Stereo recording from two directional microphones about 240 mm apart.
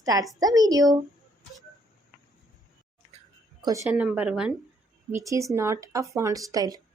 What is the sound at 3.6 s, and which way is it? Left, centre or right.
Speech, centre.